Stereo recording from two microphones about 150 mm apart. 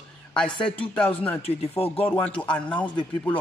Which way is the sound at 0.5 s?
35° left (ahead or behind).